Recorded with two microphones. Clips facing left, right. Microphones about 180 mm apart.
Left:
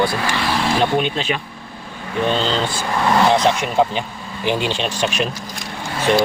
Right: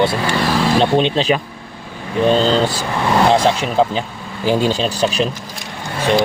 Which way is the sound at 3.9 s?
40° right (ahead or behind).